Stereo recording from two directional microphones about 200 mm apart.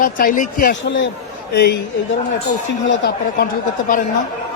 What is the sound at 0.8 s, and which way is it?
Speech, 65° left (ahead or behind).